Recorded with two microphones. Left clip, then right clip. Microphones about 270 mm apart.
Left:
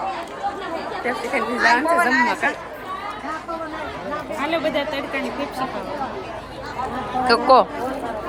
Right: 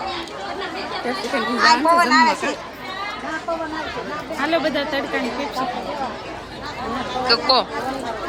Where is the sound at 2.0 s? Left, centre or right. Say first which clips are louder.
Right 3 dB; right.